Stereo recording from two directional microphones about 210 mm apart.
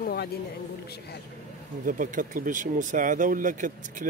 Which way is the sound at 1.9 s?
40° right (ahead or behind).